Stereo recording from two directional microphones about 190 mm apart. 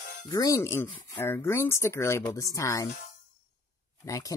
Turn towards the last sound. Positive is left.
turn(degrees=15)  # may be behind; listen again after turning